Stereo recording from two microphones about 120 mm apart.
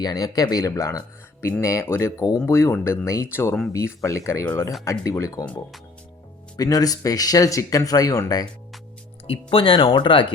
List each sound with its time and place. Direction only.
0.0 s speech: 30° left (ahead or behind)
6.6 s speech: 30° left (ahead or behind)
9.2 s speech: 50° left (ahead or behind)